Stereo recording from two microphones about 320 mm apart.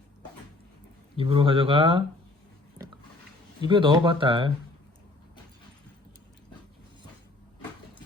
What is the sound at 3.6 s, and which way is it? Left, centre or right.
Speech, centre.